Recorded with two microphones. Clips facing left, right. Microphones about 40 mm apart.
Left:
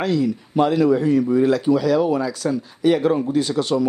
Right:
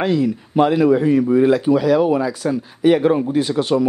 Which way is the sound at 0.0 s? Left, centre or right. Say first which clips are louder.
Right 2 dB; right.